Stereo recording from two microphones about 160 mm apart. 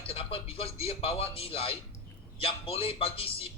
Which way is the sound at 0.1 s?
35° left (ahead or behind).